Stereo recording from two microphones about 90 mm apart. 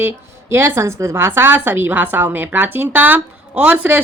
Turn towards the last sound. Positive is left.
turn(degrees=-15)  # may be behind; listen again after turning